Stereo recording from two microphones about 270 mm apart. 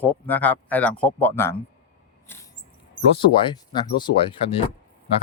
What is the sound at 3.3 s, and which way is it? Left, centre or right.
Speech, centre.